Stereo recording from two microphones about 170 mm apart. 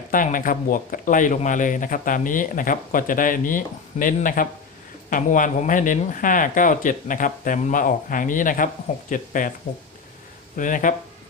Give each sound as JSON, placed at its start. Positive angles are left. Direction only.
{"t": 0.1, "sound": "speech", "side_deg": 50}
{"t": 10.6, "sound": "speech", "side_deg": 50}